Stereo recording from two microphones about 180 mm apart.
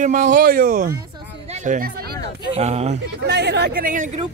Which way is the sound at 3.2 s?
70° right (ahead or behind).